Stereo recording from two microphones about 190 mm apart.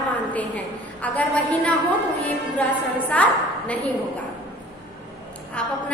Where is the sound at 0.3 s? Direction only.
10° left (ahead or behind).